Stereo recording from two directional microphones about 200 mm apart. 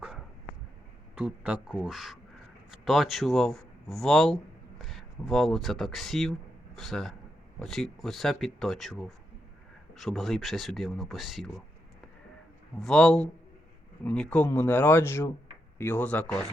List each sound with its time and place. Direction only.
1.1 s speech: 5° right (ahead or behind)
12.8 s speech: 5° left (ahead or behind)